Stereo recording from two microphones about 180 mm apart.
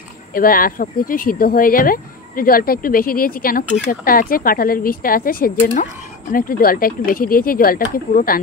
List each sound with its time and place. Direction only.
0.3 s speech: 55° left (ahead or behind)